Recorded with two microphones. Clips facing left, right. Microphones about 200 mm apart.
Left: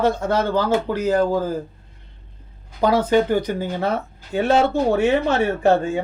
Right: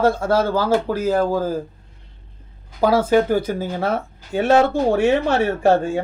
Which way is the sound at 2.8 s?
5° right (ahead or behind).